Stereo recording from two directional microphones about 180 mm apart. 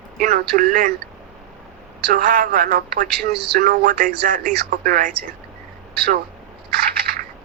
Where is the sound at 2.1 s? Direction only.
50° right (ahead or behind).